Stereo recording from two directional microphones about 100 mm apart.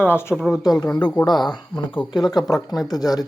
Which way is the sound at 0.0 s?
25° left (ahead or behind).